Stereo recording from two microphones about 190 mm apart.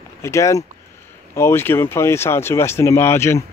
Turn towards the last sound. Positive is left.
turn(degrees=15)  # may be behind; listen again after turning